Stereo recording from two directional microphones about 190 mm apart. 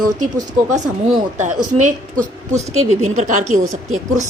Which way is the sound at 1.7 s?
40° right (ahead or behind).